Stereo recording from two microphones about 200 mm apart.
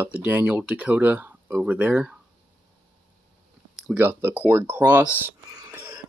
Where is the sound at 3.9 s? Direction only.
10° right (ahead or behind).